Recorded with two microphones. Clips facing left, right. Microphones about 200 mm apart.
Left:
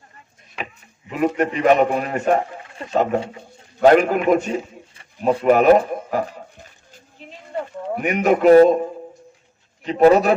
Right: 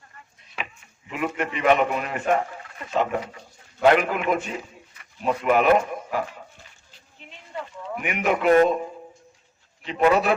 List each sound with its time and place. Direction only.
1.1 s a man's voice: 40° left (ahead or behind)
6.9 s a sound: 40° left (ahead or behind)
7.9 s a man's voice: 40° left (ahead or behind)
9.8 s a man's voice: 40° left (ahead or behind)